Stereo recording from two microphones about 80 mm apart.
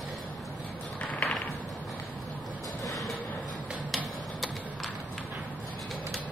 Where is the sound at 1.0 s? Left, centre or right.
Centre.